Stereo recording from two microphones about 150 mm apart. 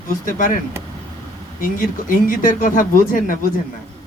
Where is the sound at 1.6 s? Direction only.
65° left (ahead or behind).